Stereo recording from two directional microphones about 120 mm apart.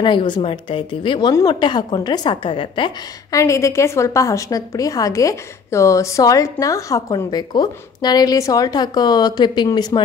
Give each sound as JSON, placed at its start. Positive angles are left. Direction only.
{"t": 0.0, "sound": "a woman's voice", "side_deg": 40}
{"t": 3.3, "sound": "a woman's voice", "side_deg": 25}